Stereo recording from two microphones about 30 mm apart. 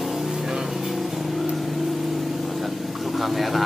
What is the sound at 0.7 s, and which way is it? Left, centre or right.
Vehicle, centre.